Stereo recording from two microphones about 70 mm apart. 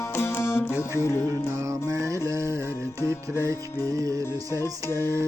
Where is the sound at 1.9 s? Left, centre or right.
Right.